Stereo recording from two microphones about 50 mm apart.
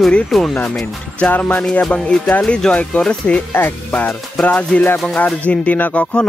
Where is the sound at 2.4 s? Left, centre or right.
Centre.